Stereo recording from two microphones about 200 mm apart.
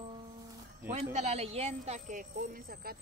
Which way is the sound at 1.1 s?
30° right (ahead or behind).